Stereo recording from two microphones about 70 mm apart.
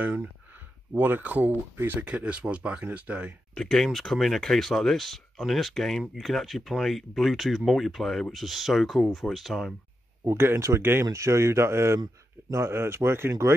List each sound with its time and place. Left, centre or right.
0.0 s speech: right
2.0 s speech: centre
3.5 s speech: centre
10.2 s speech: right
11.1 s speech: right